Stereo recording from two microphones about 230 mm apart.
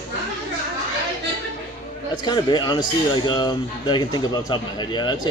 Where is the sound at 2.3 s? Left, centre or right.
Centre.